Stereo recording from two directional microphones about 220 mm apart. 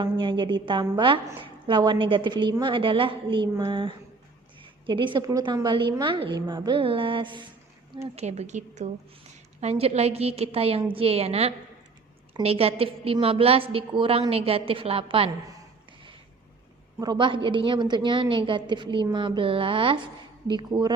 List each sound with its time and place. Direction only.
0.0 s a woman's voice: 20° right (ahead or behind)
17.0 s a woman's voice: 20° right (ahead or behind)